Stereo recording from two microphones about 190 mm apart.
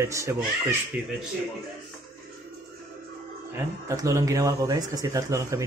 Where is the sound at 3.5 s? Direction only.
15° right (ahead or behind).